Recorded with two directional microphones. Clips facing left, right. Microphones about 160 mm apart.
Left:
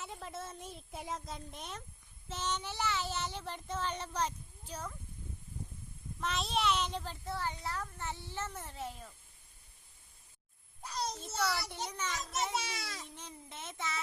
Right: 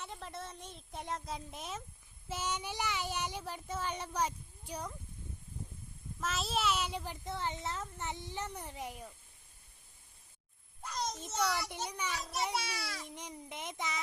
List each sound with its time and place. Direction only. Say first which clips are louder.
0.0 s a child's voice: left 1 dB; centre (ahead or behind); by 4.9 s 15° right (ahead or behind)
6.1 s a child's voice: left 1 dB; centre (ahead or behind)
11.2 s a child's voice: right 2 dB; 15° right (ahead or behind)